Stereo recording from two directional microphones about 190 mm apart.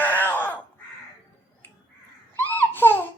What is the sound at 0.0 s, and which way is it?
Crow, 10° left (ahead or behind).